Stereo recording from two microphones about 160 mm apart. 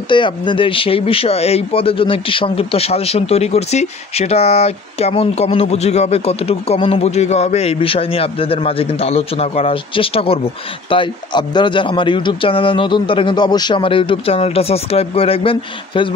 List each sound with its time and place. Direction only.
0.1 s speech: 30° left (ahead or behind)